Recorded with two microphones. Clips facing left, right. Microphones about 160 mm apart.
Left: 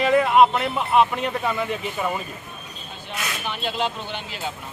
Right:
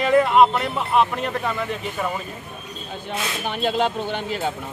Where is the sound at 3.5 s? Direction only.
45° right (ahead or behind).